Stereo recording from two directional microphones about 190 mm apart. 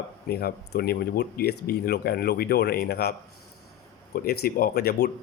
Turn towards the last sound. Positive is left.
turn(degrees=55)  # may be behind; listen again after turning